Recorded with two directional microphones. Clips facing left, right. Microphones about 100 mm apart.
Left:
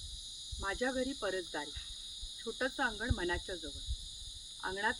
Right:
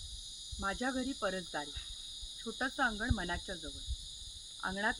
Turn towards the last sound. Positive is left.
turn(degrees=-25)  # may be behind; listen again after turning